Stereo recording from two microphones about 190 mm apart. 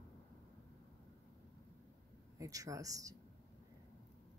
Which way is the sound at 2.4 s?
15° right (ahead or behind).